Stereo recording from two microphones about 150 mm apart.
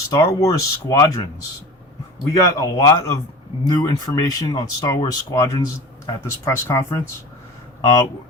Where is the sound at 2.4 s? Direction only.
25° left (ahead or behind).